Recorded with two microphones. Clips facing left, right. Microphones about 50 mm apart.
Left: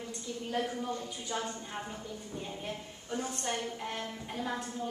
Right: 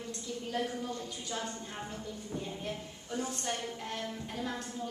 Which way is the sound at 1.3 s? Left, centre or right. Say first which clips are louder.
Left 3 dB; centre.